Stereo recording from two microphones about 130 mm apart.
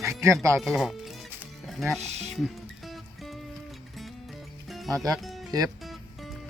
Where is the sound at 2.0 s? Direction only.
60° right (ahead or behind).